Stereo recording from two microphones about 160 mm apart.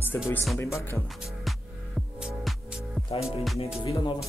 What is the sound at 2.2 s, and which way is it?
Music, 5° right (ahead or behind).